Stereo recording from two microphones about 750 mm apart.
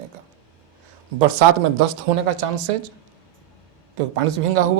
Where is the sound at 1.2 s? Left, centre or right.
Right.